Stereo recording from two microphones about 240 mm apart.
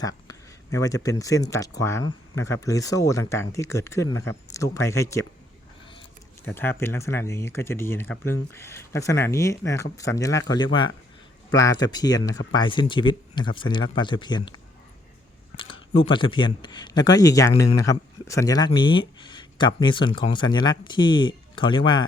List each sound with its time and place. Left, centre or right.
0.0 s speech: centre
6.4 s speech: centre
15.5 s speech: left